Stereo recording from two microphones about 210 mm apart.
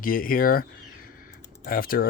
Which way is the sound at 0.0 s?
40° left (ahead or behind).